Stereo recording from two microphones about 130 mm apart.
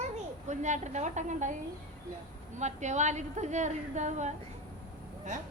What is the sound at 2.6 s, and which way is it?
A woman's voice, 65° right (ahead or behind).